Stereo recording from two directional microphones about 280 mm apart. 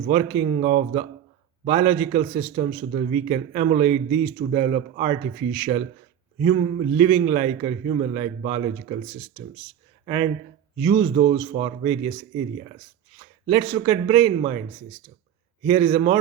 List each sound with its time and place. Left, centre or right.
0.1 s speech: right
10.8 s speech: centre
13.5 s a man's voice: centre
15.6 s speech: centre